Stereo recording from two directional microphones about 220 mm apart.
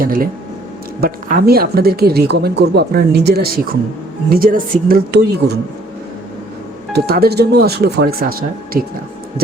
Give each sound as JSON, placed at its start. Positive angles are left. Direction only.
{"t": 0.0, "sound": "speech", "side_deg": -40}
{"t": 6.9, "sound": "speech", "side_deg": -45}